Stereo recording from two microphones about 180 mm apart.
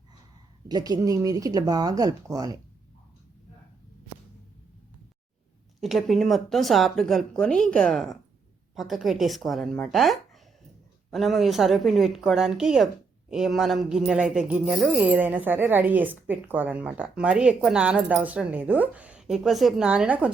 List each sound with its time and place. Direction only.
0.7 s speech: 20° right (ahead or behind)
5.8 s a woman's voice: centre (ahead or behind)